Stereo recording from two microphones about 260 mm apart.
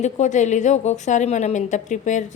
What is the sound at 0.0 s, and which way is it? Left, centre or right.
A woman's voice, left.